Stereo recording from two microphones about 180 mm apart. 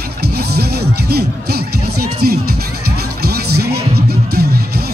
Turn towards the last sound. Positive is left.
turn(degrees=-60)  # may be behind; listen again after turning